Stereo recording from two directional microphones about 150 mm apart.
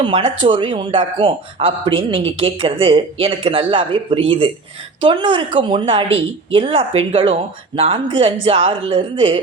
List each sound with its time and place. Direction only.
0.0 s speech: 35° right (ahead or behind)